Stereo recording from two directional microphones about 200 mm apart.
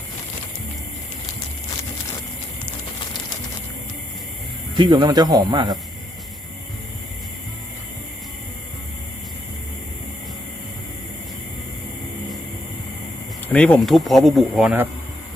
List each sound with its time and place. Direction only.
4.8 s speech: 20° right (ahead or behind)
13.5 s speech: 5° left (ahead or behind)